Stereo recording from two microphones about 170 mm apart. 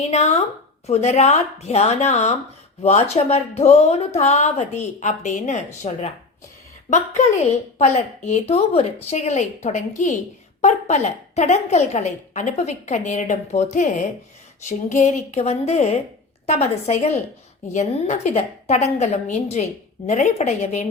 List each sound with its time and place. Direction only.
0.0 s speech: 40° left (ahead or behind)
7.8 s a woman's voice: 40° left (ahead or behind)